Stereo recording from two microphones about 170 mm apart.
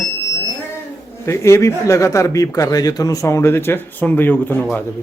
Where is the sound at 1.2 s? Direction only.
15° left (ahead or behind).